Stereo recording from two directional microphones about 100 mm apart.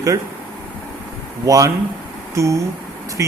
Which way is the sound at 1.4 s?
35° right (ahead or behind).